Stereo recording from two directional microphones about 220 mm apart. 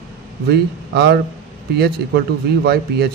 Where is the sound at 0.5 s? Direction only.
50° right (ahead or behind).